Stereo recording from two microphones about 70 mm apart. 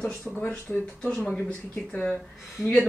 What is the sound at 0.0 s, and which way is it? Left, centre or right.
Speech, centre.